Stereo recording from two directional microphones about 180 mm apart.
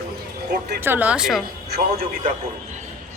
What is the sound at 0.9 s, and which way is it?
Speech, 10° right (ahead or behind).